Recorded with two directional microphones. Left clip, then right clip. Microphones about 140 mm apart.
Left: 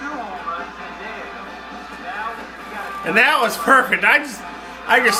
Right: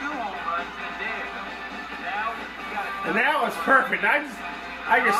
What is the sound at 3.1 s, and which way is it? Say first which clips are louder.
Speech: left 8 dB; 35° left (ahead or behind).